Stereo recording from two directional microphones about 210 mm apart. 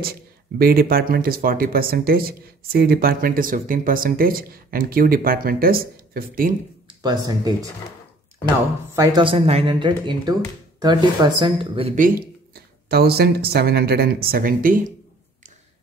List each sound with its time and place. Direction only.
0.0 s speech: 45° right (ahead or behind)
7.0 s speech: 20° right (ahead or behind)
8.9 s speech: 20° right (ahead or behind)
12.0 s speech: 45° right (ahead or behind)